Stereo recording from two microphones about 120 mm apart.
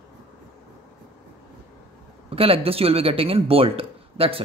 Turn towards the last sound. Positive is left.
turn(degrees=-50)  # may be behind; listen again after turning